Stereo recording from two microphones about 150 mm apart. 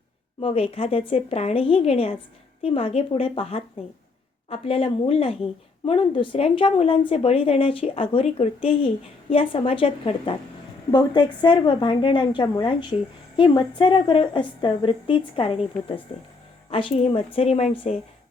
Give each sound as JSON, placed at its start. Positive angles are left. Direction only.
{"t": 0.3, "sound": "a woman's voice", "side_deg": 40}